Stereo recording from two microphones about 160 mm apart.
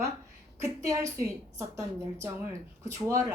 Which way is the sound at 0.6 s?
20° right (ahead or behind).